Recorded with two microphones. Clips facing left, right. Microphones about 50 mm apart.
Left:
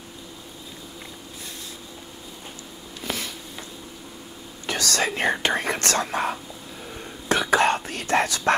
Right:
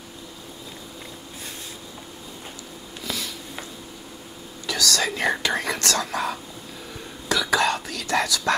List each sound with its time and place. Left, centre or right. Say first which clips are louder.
3.0 s a sound: left 1 dB; left
4.6 s speech: even; left
7.2 s whispering: left 2 dB; left